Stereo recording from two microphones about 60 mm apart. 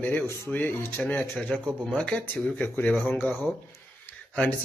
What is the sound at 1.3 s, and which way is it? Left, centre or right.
Speech, centre.